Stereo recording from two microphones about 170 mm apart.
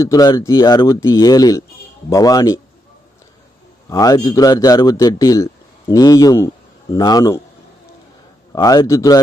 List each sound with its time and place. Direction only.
0.0 s speech: 20° left (ahead or behind)
3.8 s speech: 20° left (ahead or behind)
8.5 s speech: 20° left (ahead or behind)